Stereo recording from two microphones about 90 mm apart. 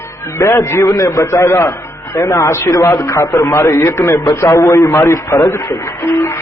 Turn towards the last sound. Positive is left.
turn(degrees=30)  # may be behind; listen again after turning